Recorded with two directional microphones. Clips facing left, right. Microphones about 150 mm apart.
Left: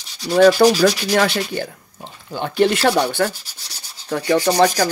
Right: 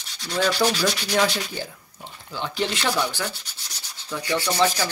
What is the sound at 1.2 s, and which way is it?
Speech, 60° left (ahead or behind).